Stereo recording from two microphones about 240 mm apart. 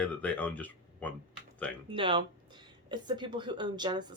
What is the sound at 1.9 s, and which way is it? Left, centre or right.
A woman's voice, right.